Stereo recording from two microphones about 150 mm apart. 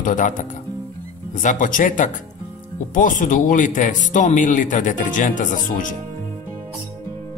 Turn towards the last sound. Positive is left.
turn(degrees=60)  # may be behind; listen again after turning